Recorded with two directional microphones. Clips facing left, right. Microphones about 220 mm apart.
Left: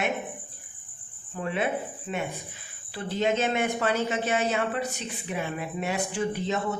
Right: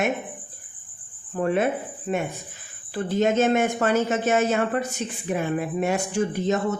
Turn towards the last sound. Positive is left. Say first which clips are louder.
# right 5 dB
turn(degrees=-45)  # may be behind; listen again after turning